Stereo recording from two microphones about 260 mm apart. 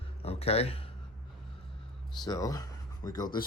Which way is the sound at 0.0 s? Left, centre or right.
Left.